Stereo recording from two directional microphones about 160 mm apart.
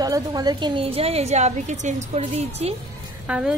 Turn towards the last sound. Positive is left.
turn(degrees=-5)  # may be behind; listen again after turning